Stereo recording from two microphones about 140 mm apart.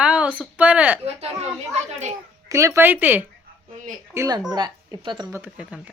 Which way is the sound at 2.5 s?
20° right (ahead or behind).